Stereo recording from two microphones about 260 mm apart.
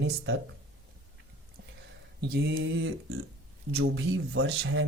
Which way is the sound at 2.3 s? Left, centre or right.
Right.